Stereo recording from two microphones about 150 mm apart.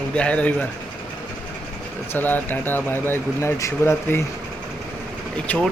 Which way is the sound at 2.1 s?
10° left (ahead or behind).